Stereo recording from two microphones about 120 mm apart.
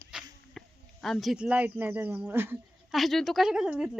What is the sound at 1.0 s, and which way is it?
Speech, centre (ahead or behind).